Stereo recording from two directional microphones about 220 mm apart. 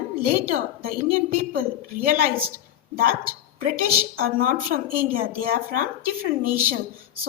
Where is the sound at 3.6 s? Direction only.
40° right (ahead or behind).